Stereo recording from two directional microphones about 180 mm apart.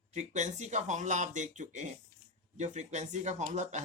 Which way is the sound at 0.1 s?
40° right (ahead or behind).